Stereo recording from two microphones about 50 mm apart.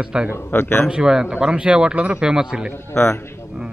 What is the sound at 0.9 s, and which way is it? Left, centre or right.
A man's voice, centre.